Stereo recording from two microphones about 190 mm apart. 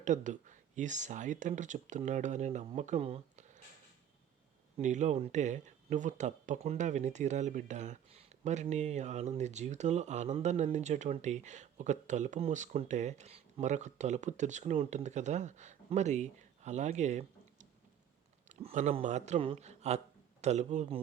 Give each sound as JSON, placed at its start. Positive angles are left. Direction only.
{"t": 0.0, "sound": "speech", "side_deg": -40}
{"t": 4.8, "sound": "speech", "side_deg": -40}